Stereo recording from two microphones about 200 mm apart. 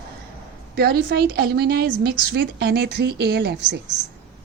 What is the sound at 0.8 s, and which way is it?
A woman's voice, 55° right (ahead or behind).